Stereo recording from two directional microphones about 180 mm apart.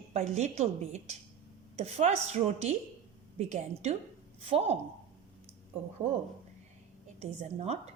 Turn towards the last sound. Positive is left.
turn(degrees=-35)  # may be behind; listen again after turning